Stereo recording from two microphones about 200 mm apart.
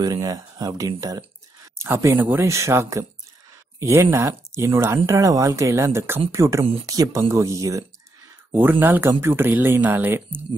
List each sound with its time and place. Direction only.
0.0 s speech: 20° right (ahead or behind)